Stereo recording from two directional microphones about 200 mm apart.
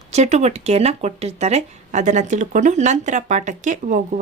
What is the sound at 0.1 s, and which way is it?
Speech, 35° right (ahead or behind).